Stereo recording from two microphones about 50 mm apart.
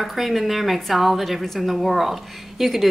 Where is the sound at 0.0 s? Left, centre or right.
Centre.